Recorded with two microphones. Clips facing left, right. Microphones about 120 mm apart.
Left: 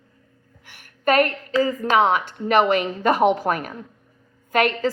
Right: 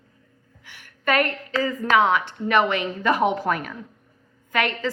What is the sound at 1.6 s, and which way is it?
A woman's voice, 40° left (ahead or behind).